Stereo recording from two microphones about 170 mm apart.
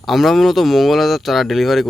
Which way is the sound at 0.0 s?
Centre (ahead or behind).